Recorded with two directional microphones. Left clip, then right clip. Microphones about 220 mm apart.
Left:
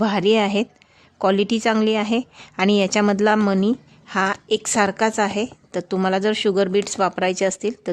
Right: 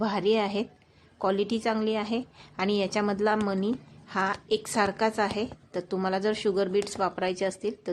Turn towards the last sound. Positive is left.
turn(degrees=30)  # may be behind; listen again after turning